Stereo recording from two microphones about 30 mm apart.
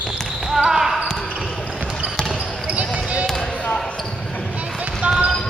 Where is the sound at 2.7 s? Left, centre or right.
Right.